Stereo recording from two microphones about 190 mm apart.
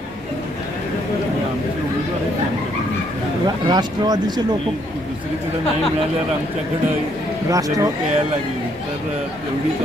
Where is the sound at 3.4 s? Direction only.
20° right (ahead or behind).